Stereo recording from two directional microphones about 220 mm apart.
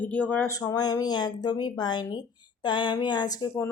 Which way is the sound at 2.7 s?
20° left (ahead or behind).